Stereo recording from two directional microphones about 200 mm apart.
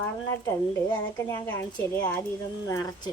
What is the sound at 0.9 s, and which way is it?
Speech, 15° left (ahead or behind).